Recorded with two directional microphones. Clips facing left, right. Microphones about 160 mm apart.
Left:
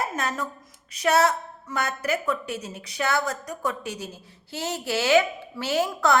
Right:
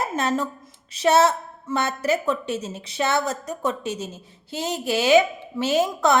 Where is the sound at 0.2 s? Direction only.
25° right (ahead or behind).